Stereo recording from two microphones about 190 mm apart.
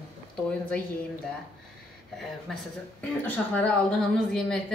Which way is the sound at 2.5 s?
5° left (ahead or behind).